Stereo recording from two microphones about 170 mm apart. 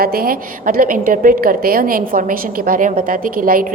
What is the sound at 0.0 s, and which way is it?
A woman's voice, 60° right (ahead or behind).